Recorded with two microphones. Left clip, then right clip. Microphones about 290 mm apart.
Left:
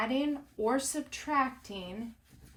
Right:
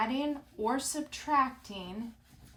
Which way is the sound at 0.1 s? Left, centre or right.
Centre.